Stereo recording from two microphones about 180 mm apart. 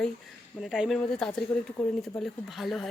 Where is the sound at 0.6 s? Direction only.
5° right (ahead or behind).